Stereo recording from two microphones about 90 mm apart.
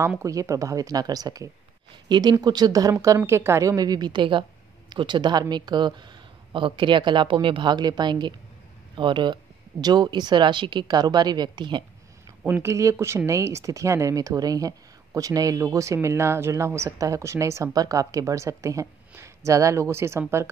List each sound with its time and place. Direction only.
0.2 s speech: 40° right (ahead or behind)
2.0 s a woman's voice: 55° right (ahead or behind)
12.4 s speech: 20° right (ahead or behind)
12.7 s speech: 35° right (ahead or behind)